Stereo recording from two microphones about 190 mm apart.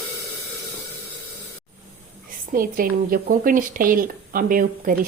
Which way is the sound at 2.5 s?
50° right (ahead or behind).